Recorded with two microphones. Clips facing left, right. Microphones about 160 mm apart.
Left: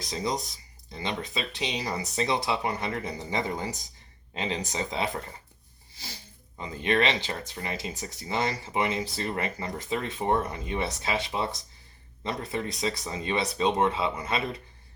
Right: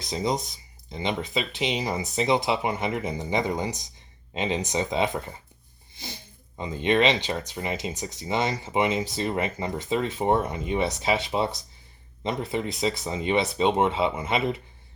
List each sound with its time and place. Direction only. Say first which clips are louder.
0.0 s speech: right 3 dB; 20° right (ahead or behind)
6.6 s speech: right 4 dB; 20° right (ahead or behind)